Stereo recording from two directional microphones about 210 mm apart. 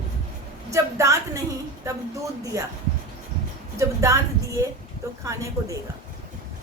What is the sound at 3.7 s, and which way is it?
Speech, 15° right (ahead or behind).